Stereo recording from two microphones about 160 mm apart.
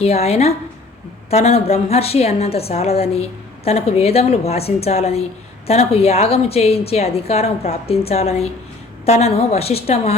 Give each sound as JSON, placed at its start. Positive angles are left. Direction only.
{"t": 0.0, "sound": "a woman's voice", "side_deg": 40}